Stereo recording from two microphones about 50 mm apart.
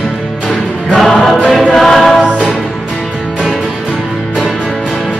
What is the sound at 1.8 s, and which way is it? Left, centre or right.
Music, centre.